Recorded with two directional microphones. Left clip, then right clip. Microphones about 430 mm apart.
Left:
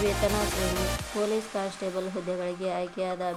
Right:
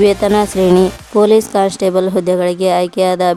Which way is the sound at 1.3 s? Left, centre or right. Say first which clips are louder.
Right 19 dB; right.